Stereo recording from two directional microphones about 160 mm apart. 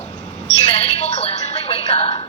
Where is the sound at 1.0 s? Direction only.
40° left (ahead or behind).